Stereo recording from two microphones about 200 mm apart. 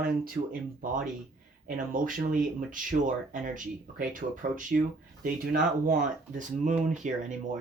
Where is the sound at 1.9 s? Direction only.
40° right (ahead or behind).